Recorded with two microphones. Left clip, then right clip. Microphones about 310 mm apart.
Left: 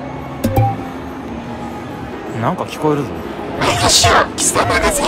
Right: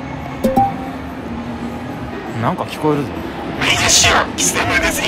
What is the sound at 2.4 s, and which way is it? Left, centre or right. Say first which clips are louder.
Speech: left 1 dB; centre.